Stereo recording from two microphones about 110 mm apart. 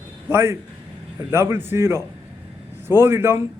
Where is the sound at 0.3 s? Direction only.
25° right (ahead or behind).